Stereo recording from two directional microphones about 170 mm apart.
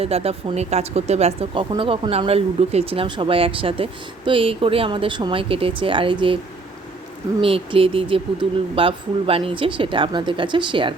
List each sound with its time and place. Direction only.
0.0 s speech: 35° right (ahead or behind)
7.4 s speech: 30° right (ahead or behind)